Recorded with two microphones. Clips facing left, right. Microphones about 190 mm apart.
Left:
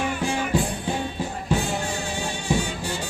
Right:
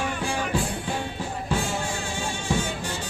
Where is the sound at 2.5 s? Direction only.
15° left (ahead or behind).